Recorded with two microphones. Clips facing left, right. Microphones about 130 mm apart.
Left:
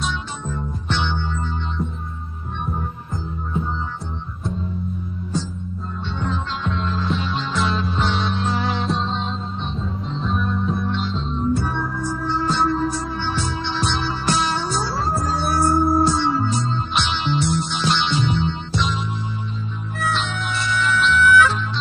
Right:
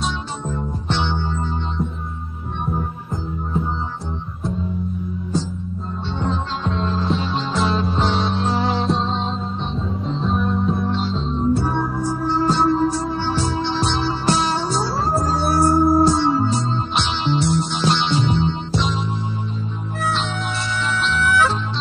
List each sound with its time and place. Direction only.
0.0 s music: 35° right (ahead or behind)
6.1 s music: 30° right (ahead or behind)
10.3 s music: 35° right (ahead or behind)